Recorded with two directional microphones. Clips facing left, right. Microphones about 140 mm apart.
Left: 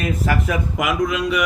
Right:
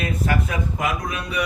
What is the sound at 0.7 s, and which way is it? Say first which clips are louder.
Speech: left 5 dB; 90° left.